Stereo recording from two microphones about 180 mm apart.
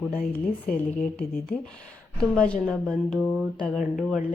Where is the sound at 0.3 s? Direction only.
10° left (ahead or behind).